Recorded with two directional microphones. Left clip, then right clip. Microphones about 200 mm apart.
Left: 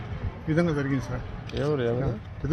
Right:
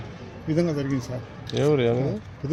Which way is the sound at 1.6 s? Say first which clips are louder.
Right 5 dB; 60° right (ahead or behind).